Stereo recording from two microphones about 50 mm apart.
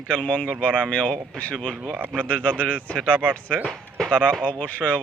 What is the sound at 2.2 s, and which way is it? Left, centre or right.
Speech, left.